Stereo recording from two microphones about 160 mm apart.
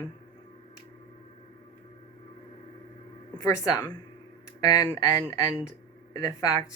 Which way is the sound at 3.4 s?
20° left (ahead or behind).